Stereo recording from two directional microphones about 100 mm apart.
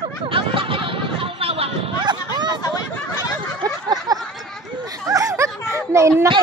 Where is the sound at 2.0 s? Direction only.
45° right (ahead or behind).